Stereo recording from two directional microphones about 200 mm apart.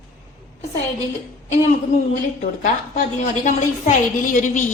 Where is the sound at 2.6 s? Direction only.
40° left (ahead or behind).